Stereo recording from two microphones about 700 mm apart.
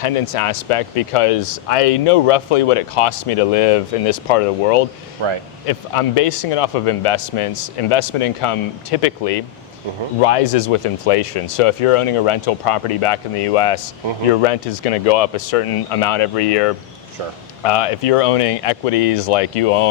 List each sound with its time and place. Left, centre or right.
0.0 s speech: left
5.2 s speech: right
5.6 s speech: left